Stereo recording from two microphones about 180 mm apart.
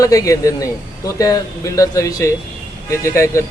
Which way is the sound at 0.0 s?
15° left (ahead or behind).